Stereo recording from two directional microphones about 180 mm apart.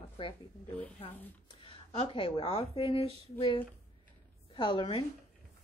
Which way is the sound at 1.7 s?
30° left (ahead or behind).